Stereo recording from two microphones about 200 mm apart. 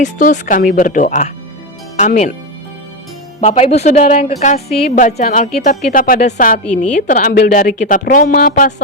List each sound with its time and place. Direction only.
0.0 s speech: 40° left (ahead or behind)
3.5 s speech: 30° left (ahead or behind)